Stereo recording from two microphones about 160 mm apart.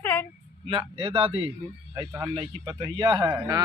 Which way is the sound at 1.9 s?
25° right (ahead or behind).